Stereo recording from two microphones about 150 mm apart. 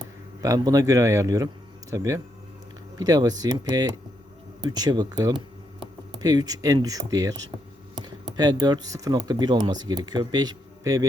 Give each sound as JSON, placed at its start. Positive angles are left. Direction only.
{"t": 0.4, "sound": "speech", "side_deg": -25}
{"t": 6.1, "sound": "speech", "side_deg": -25}
{"t": 8.4, "sound": "speech", "side_deg": -25}